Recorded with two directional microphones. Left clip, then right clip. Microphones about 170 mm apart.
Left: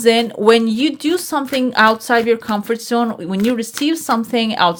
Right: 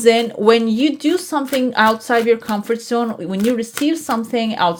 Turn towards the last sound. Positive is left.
turn(degrees=10)  # may be behind; listen again after turning